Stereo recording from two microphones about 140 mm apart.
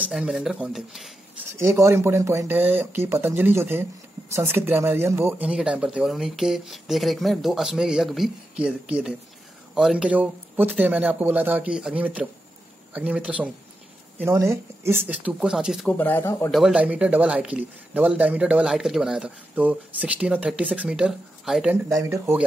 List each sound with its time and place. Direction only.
0.1 s speech: 5° right (ahead or behind)
1.7 s speech: 20° right (ahead or behind)
5.5 s speech: 5° right (ahead or behind)
15.9 s speech: 15° left (ahead or behind)
16.5 s speech: 5° right (ahead or behind)
21.8 s speech: 20° right (ahead or behind)